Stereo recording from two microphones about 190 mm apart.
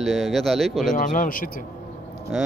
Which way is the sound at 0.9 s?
45° left (ahead or behind).